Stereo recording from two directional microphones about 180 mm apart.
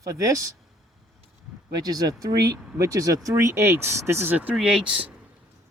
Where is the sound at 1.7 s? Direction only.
20° right (ahead or behind).